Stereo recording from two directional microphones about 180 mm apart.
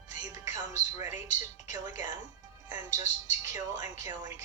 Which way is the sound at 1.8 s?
20° right (ahead or behind).